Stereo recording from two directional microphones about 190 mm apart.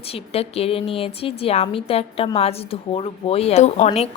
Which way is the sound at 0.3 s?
30° left (ahead or behind).